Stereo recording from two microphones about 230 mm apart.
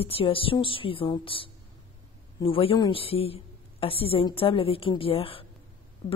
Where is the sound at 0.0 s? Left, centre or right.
Left.